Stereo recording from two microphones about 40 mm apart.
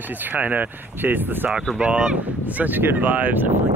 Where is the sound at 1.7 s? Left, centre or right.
Right.